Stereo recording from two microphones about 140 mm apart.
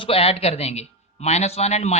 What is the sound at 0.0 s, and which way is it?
A man's voice, 45° left (ahead or behind).